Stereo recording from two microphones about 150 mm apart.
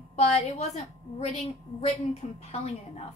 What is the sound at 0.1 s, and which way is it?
A woman's voice, 45° left (ahead or behind).